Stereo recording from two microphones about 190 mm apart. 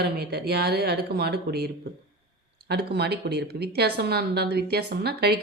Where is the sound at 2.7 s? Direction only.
60° right (ahead or behind).